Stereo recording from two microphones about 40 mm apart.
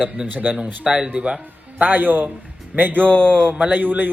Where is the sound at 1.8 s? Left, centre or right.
Right.